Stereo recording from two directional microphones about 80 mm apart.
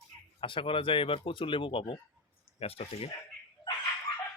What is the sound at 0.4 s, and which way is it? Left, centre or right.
Speech, left.